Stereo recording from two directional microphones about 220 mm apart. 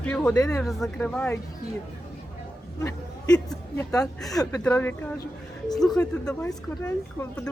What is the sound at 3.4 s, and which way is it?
A woman's voice, 15° left (ahead or behind).